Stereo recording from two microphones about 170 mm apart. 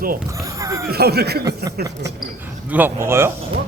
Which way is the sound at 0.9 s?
70° right (ahead or behind).